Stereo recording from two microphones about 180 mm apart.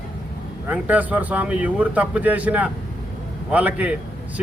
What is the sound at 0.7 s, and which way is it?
A man's voice, 10° right (ahead or behind).